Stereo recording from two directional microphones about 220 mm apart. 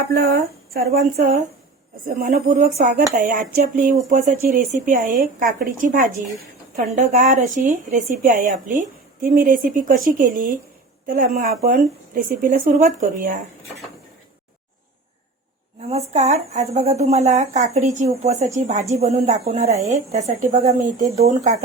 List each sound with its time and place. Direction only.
0.1 s speech: 40° right (ahead or behind)
15.9 s speech: 30° right (ahead or behind)